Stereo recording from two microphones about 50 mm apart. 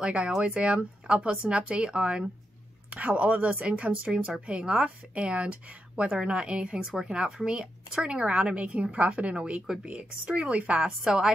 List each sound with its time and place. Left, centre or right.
0.0 s a woman's voice: centre
11.1 s a woman's voice: centre